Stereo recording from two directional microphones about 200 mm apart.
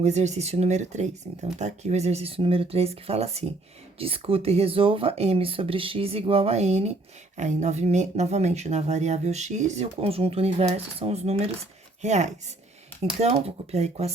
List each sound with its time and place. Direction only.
0.0 s speech: 35° right (ahead or behind)